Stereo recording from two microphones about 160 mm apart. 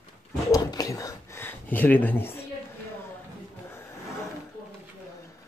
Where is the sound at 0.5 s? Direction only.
20° left (ahead or behind).